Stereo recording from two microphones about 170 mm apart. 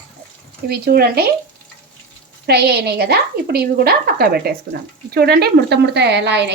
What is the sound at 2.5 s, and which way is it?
A woman's voice, 70° right (ahead or behind).